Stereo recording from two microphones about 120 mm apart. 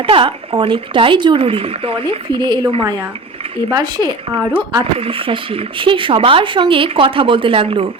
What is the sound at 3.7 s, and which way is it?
Speech, 35° right (ahead or behind).